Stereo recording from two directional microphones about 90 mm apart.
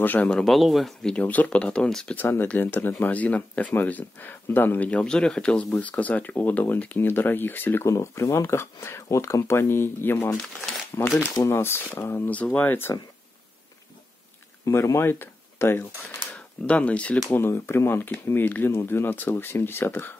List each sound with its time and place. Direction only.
0.0 s speech: 15° left (ahead or behind)
0.5 s a man's voice: centre (ahead or behind)
1.1 s speech: 20° left (ahead or behind)
2.1 s speech: 20° left (ahead or behind)
12.3 s speech: 15° left (ahead or behind)
14.6 s speech: 35° left (ahead or behind)
16.3 s speech: 15° left (ahead or behind)
17.3 s speech: 25° left (ahead or behind)